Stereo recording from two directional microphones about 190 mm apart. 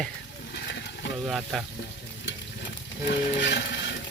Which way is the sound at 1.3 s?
Centre (ahead or behind).